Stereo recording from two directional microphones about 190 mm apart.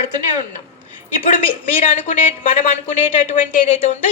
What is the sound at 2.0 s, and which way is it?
A woman's voice, 40° left (ahead or behind).